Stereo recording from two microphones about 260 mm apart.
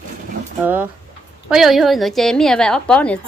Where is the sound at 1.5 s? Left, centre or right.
Centre.